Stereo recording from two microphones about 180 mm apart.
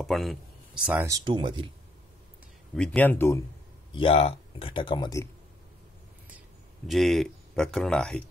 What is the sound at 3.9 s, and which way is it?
Speech, 30° left (ahead or behind).